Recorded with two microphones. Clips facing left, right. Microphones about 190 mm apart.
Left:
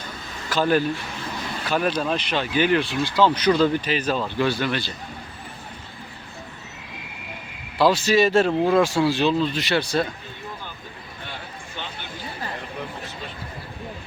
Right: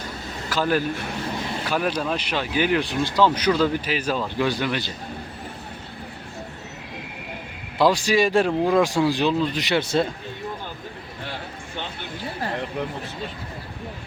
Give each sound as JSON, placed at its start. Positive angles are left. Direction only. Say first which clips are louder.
{"t": 0.5, "sound": "speech", "louder": "left 2 dB", "side_deg": -10}
{"t": 1.7, "sound": "speech", "louder": "left 2 dB", "side_deg": -5}
{"t": 7.8, "sound": "speech", "louder": "left 1 dB", "side_deg": -15}